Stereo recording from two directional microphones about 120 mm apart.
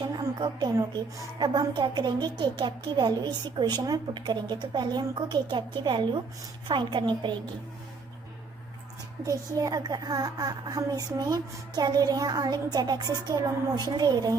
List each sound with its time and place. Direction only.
0.0 s a woman's voice: 40° right (ahead or behind)
9.2 s a woman's voice: 30° right (ahead or behind)